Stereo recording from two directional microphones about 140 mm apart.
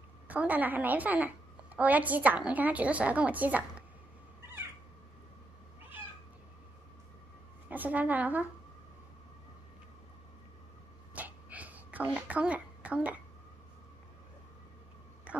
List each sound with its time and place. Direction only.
0.3 s a woman's voice: 10° right (ahead or behind)
7.7 s a woman's voice: 10° right (ahead or behind)
11.1 s a sound: 10° right (ahead or behind)